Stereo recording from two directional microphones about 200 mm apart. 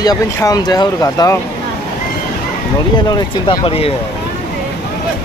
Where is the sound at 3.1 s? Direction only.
25° left (ahead or behind).